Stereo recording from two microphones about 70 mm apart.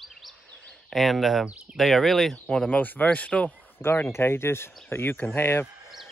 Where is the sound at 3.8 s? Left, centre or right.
Left.